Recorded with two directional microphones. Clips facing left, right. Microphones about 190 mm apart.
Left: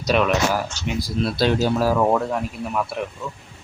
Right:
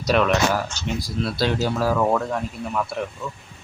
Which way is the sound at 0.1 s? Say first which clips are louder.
Even; 5° left (ahead or behind).